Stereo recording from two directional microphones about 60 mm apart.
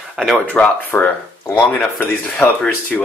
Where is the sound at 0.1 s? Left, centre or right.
Centre.